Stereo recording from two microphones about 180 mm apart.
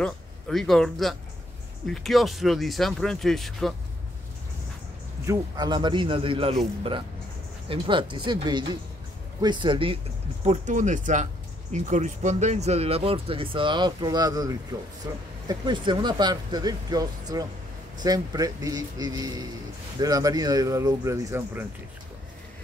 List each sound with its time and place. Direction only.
0.0 s a man's voice: centre (ahead or behind)
5.2 s speech: 20° right (ahead or behind)
7.6 s speech: 30° right (ahead or behind)
10.4 s speech: 40° right (ahead or behind); by 21.6 s 15° right (ahead or behind)